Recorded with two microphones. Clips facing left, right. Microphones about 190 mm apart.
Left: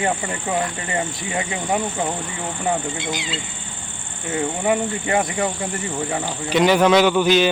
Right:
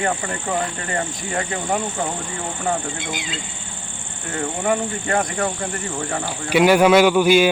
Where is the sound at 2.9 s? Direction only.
50° right (ahead or behind).